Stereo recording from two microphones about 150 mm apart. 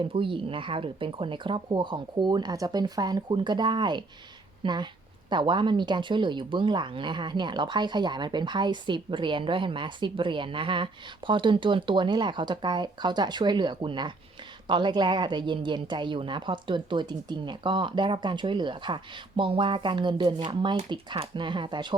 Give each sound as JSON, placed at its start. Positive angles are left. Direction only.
{"t": 0.0, "sound": "a woman's voice", "side_deg": -35}